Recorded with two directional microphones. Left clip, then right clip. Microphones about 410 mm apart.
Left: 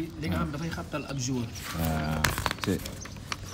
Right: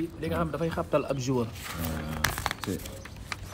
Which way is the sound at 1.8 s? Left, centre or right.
Centre.